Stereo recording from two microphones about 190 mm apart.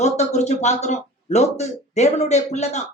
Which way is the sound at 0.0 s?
35° left (ahead or behind).